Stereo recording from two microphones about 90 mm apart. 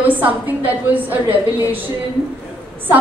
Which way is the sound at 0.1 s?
20° right (ahead or behind).